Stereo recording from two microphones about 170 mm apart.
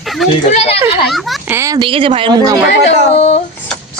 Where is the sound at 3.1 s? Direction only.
35° left (ahead or behind).